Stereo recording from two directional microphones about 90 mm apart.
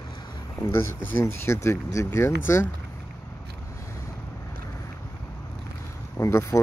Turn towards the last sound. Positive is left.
turn(degrees=30)  # may be behind; listen again after turning